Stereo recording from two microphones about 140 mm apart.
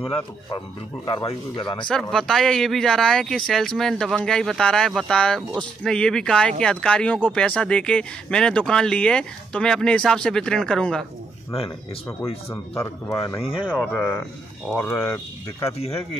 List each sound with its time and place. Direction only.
0.0 s speech: 40° left (ahead or behind)
1.9 s speech: 5° left (ahead or behind)
12.4 s speech: 20° left (ahead or behind)
13.4 s speech: 40° left (ahead or behind)
13.9 s speech: centre (ahead or behind)
14.7 s speech: 10° left (ahead or behind)